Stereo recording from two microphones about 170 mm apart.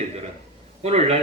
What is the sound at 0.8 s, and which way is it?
Speech, 40° right (ahead or behind).